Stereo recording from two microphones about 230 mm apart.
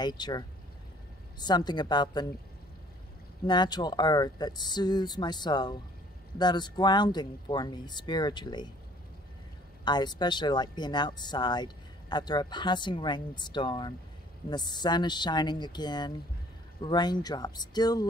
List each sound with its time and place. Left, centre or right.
0.0 s speech: centre
3.4 s speech: centre
9.8 s speech: centre